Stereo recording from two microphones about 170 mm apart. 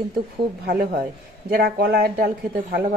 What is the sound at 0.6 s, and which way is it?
A woman's voice, 60° right (ahead or behind).